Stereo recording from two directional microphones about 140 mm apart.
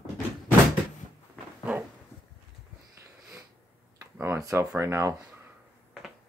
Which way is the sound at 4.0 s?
15° right (ahead or behind).